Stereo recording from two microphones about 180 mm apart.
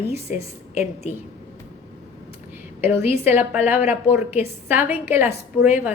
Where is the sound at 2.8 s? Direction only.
10° right (ahead or behind).